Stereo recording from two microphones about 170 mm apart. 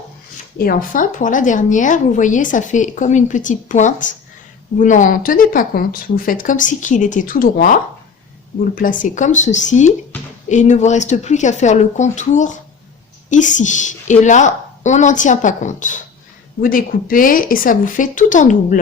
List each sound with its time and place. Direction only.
0.6 s a woman's voice: 55° left (ahead or behind)